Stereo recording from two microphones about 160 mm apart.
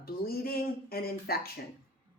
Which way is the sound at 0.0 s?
70° left (ahead or behind).